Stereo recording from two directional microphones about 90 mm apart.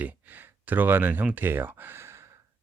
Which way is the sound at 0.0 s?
20° right (ahead or behind).